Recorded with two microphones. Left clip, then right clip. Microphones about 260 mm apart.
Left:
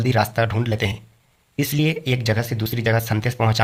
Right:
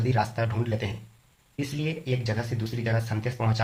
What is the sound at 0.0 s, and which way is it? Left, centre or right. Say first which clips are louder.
Speech: left 7 dB; left.